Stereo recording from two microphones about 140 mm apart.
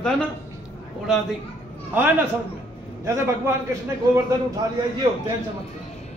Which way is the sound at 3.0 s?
20° right (ahead or behind).